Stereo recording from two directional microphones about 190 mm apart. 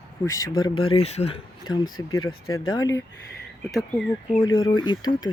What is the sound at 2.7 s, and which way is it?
Speech, 20° left (ahead or behind).